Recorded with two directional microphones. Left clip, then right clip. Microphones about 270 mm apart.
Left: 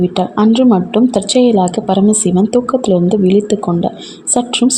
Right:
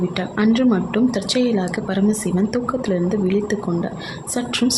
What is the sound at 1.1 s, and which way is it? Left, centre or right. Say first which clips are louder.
A woman's voice: left 9 dB; centre.